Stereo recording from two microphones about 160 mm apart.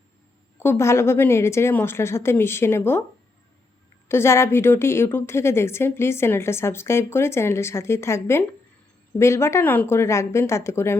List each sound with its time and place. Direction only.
0.6 s a woman's voice: 15° left (ahead or behind)
4.1 s a woman's voice: 15° left (ahead or behind)